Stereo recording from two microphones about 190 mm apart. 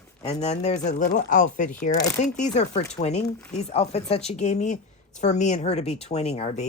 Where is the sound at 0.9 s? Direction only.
40° left (ahead or behind).